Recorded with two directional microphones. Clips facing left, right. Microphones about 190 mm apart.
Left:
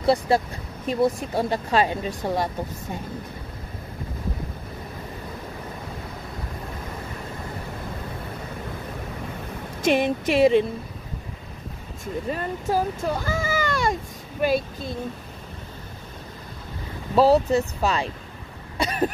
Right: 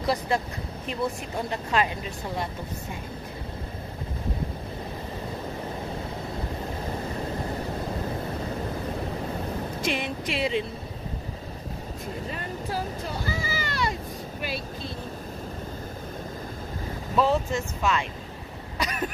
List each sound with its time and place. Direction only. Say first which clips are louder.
0.0 s speech: left 6 dB; 30° left (ahead or behind)
9.8 s speech: left 12 dB; 50° left (ahead or behind)
12.3 s speech: left 10 dB; 45° left (ahead or behind)
17.1 s speech: left 7 dB; 35° left (ahead or behind)
18.8 s a sound: left 6 dB; 30° left (ahead or behind)